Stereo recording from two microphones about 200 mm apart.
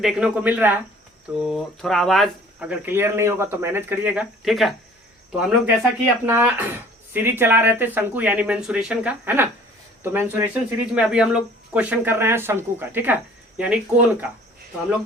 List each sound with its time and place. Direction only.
0.0 s speech: 5° right (ahead or behind)